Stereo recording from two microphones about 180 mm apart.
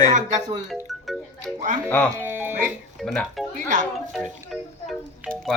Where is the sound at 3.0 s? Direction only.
Centre (ahead or behind).